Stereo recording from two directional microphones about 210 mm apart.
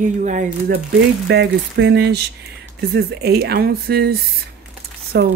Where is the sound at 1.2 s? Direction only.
50° right (ahead or behind).